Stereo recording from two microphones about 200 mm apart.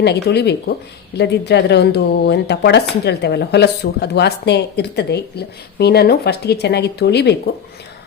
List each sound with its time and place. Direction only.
0.0 s speech: 55° left (ahead or behind)